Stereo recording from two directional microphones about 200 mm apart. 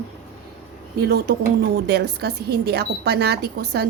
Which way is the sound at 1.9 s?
55° right (ahead or behind).